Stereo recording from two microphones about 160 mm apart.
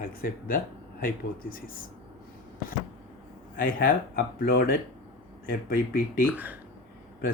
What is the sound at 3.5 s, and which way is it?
Speech, 60° left (ahead or behind).